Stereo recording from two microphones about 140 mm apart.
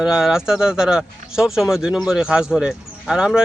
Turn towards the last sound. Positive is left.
turn(degrees=-5)  # may be behind; listen again after turning